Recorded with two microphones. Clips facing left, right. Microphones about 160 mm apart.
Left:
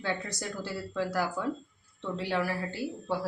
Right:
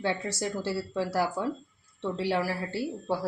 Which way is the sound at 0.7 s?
30° right (ahead or behind).